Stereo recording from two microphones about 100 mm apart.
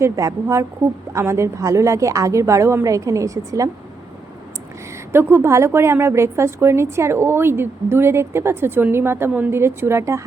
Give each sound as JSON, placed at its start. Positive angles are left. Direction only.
{"t": 0.0, "sound": "a woman's voice", "side_deg": -30}
{"t": 5.1, "sound": "a woman's voice", "side_deg": -25}